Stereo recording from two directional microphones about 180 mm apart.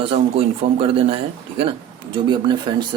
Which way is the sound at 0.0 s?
30° right (ahead or behind).